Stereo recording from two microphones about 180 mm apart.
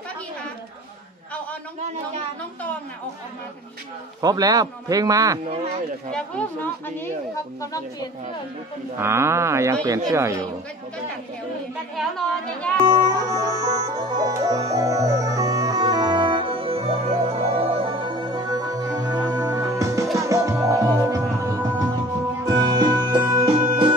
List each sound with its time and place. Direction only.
4.2 s a man's voice: 20° right (ahead or behind)
6.1 s speech: 10° left (ahead or behind)
8.9 s speech: 15° right (ahead or behind)
12.0 s a woman's voice: centre (ahead or behind)
12.8 s music: 20° right (ahead or behind)